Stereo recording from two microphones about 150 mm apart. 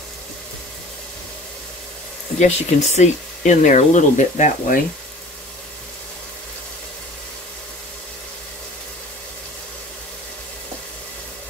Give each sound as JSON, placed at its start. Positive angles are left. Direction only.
{"t": 2.3, "sound": "speech", "side_deg": 50}